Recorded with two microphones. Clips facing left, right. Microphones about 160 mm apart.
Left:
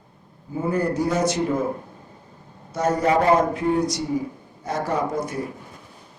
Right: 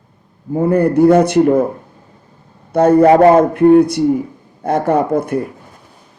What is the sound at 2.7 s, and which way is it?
A man's voice, 60° right (ahead or behind).